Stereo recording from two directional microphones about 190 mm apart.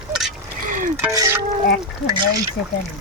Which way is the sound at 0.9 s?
15° right (ahead or behind).